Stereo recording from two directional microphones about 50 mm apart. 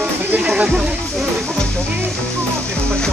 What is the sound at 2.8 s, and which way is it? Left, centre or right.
Music, centre.